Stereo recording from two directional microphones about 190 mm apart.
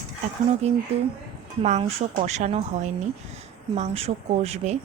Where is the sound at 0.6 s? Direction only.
35° right (ahead or behind).